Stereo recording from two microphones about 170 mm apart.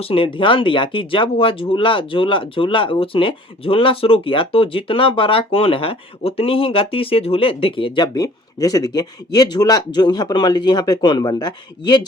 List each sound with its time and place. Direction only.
0.0 s speech: 30° left (ahead or behind)